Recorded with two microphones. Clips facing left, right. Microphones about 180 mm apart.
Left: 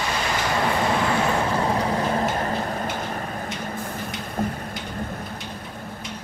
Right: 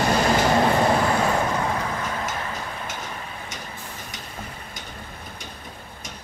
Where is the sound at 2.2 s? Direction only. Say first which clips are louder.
Left 6 dB; 45° left (ahead or behind).